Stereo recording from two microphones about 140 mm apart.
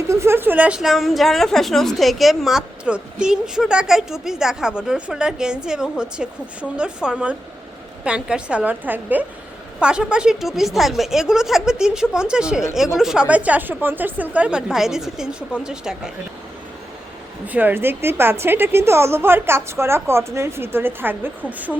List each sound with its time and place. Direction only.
0.1 s a woman's voice: 20° right (ahead or behind)
17.4 s a woman's voice: 10° right (ahead or behind)